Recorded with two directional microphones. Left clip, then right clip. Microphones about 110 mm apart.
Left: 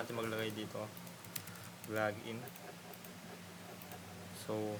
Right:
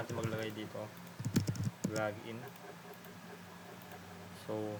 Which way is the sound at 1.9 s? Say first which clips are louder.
Left 1 dB; 5° left (ahead or behind).